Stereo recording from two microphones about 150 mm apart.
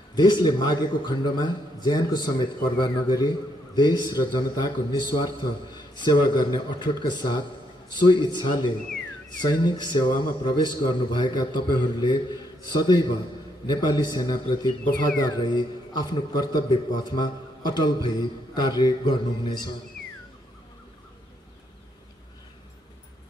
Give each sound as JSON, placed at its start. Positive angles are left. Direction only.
{"t": 0.1, "sound": "a man's voice", "side_deg": 30}